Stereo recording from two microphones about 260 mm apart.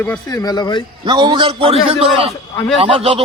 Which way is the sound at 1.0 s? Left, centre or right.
Centre.